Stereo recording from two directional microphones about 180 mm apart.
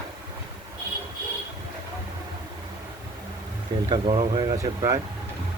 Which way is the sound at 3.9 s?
30° right (ahead or behind).